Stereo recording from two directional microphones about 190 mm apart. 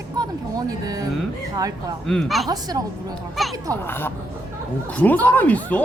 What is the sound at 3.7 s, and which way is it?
Speech, 10° left (ahead or behind).